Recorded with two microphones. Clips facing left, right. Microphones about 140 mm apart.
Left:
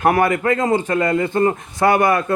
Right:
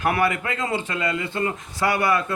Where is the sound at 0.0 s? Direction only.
45° left (ahead or behind).